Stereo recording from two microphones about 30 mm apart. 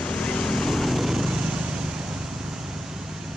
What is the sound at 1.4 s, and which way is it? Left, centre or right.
Vehicle, right.